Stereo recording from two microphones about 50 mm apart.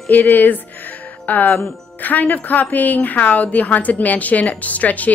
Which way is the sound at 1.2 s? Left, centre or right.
Left.